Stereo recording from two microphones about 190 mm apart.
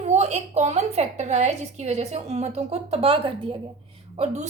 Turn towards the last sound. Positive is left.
turn(degrees=-35)  # may be behind; listen again after turning